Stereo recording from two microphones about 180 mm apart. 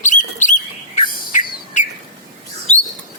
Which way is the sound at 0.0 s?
45° left (ahead or behind).